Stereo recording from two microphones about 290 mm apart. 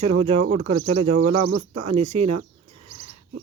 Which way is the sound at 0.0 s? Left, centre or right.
Centre.